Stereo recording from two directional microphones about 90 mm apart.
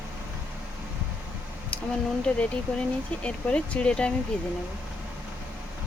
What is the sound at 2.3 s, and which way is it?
Speech, 10° left (ahead or behind).